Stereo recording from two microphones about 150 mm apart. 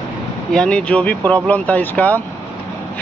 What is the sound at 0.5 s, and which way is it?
Speech, 5° left (ahead or behind).